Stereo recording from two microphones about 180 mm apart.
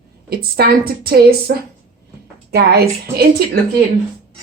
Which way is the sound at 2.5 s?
60° right (ahead or behind).